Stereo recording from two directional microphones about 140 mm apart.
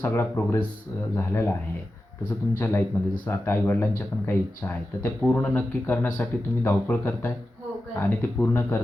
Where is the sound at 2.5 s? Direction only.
15° left (ahead or behind).